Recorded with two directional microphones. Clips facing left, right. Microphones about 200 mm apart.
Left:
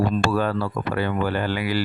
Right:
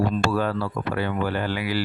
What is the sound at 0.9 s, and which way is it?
Speech, 55° left (ahead or behind).